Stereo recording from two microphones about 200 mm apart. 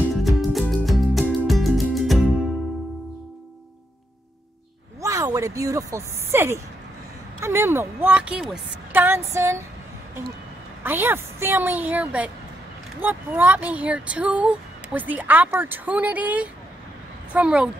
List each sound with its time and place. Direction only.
0.2 s music: centre (ahead or behind)
5.0 s speech: 15° right (ahead or behind)
9.3 s speech: 15° right (ahead or behind)
10.8 s speech: 10° right (ahead or behind)